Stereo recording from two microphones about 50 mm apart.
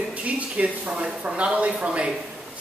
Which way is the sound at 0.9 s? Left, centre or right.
Right.